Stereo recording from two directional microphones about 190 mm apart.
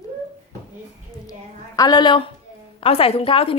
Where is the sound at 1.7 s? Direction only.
20° left (ahead or behind).